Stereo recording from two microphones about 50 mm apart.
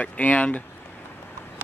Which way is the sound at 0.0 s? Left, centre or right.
Left.